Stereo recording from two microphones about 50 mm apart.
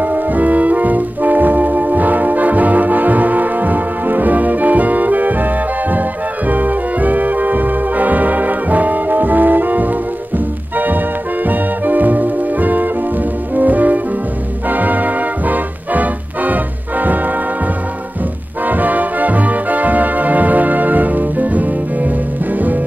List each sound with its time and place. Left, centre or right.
0.0 s music: right
18.7 s music: right